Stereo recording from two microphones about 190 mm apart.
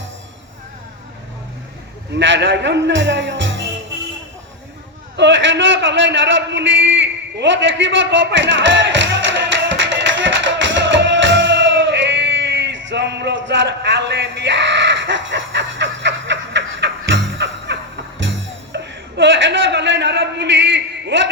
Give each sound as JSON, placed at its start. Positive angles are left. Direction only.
{"t": 2.1, "sound": "a man's voice", "side_deg": -75}
{"t": 5.1, "sound": "a man's voice", "side_deg": -70}
{"t": 7.3, "sound": "music", "side_deg": -75}
{"t": 15.0, "sound": "snicker", "side_deg": -75}
{"t": 17.2, "sound": "music", "side_deg": -70}